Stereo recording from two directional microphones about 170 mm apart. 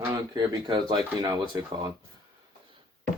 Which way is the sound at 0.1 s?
25° right (ahead or behind).